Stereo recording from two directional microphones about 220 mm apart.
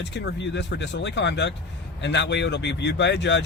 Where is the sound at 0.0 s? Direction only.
55° left (ahead or behind).